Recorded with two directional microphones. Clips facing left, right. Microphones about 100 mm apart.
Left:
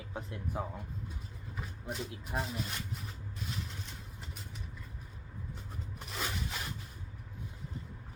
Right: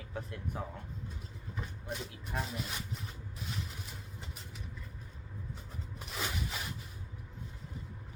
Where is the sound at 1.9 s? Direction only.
Centre (ahead or behind).